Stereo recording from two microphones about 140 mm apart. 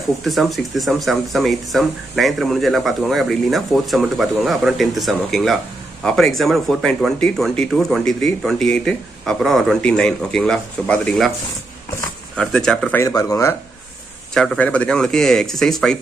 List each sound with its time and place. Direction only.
0.2 s speech: centre (ahead or behind)
12.4 s speech: 5° left (ahead or behind)
13.0 s speech: 25° left (ahead or behind)
14.3 s speech: 5° left (ahead or behind)